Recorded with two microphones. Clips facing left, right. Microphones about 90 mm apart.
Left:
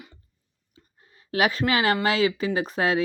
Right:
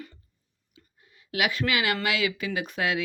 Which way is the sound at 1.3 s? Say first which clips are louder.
Left 4 dB; 35° left (ahead or behind).